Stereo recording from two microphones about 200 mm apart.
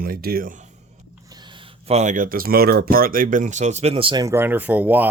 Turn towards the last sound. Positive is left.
turn(degrees=-10)  # may be behind; listen again after turning